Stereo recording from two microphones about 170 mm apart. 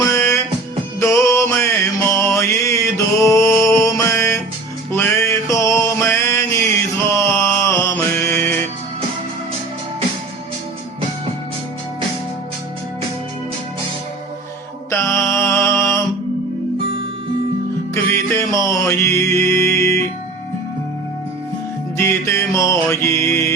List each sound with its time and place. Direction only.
0.0 s music: 15° left (ahead or behind)
7.1 s mantra: 15° left (ahead or behind)
14.8 s mantra: 15° left (ahead or behind)
17.9 s music: 15° left (ahead or behind)
21.9 s music: 15° left (ahead or behind)